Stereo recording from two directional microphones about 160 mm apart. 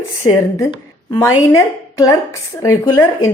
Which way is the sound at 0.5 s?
20° left (ahead or behind).